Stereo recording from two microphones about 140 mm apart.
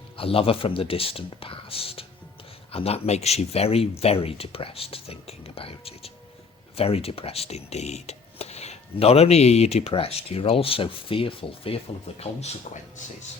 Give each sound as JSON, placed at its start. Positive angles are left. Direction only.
{"t": 0.2, "sound": "speech", "side_deg": 40}